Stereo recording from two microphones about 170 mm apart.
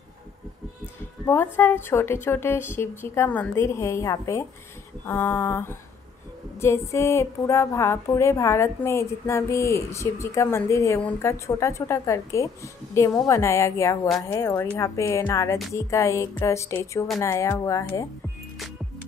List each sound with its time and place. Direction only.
1.2 s a woman's voice: 15° left (ahead or behind)